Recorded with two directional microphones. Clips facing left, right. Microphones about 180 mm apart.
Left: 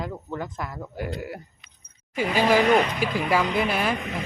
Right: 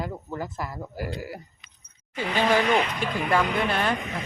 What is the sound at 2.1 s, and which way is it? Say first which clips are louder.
Speech: left 2 dB; 10° left (ahead or behind).